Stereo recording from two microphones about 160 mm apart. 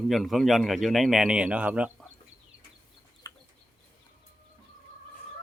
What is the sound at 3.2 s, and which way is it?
Chicken, 25° left (ahead or behind).